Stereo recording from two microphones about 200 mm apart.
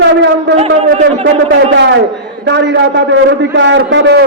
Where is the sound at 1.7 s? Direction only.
60° right (ahead or behind).